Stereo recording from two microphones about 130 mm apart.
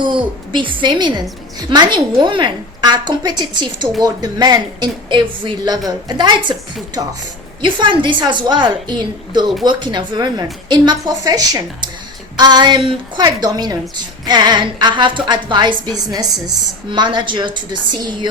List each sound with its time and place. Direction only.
0.0 s a woman's voice: 35° right (ahead or behind)
7.6 s a woman's voice: 35° right (ahead or behind)